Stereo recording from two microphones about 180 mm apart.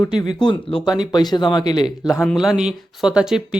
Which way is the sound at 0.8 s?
25° left (ahead or behind).